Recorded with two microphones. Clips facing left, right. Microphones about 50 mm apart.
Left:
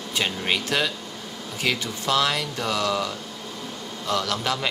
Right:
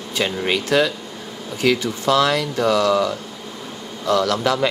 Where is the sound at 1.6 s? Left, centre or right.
Right.